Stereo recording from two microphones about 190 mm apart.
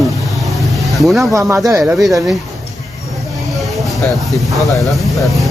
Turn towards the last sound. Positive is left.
turn(degrees=0)  # may be behind; listen again after turning